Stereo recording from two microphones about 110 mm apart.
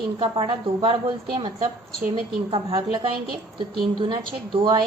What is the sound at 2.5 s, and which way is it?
A woman's voice, 55° right (ahead or behind).